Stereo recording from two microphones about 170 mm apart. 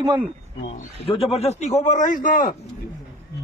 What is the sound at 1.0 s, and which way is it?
A man's voice, 35° left (ahead or behind).